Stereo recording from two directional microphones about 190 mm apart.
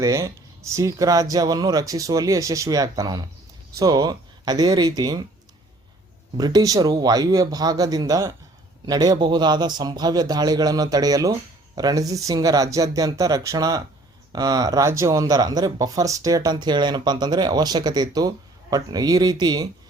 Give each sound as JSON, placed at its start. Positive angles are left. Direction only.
{"t": 0.0, "sound": "speech", "side_deg": -15}
{"t": 6.3, "sound": "speech", "side_deg": -20}